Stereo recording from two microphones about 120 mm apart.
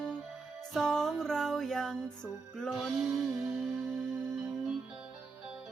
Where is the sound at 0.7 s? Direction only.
5° left (ahead or behind).